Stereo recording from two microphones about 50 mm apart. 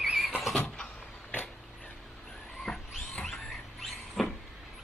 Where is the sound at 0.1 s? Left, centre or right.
Centre.